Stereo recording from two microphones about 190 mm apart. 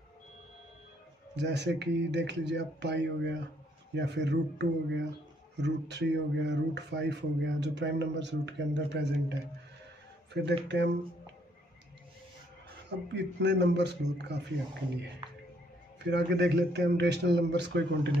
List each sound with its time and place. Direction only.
1.3 s speech: 65° right (ahead or behind)
10.3 s speech: 65° right (ahead or behind)
13.1 s speech: 65° right (ahead or behind)